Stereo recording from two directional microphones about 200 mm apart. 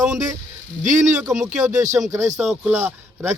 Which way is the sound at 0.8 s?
35° right (ahead or behind).